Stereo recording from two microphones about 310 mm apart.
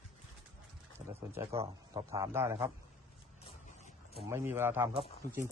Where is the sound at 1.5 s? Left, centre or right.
Centre.